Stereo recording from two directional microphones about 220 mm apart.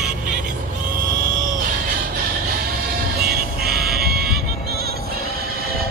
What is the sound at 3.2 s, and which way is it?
Music, 45° right (ahead or behind).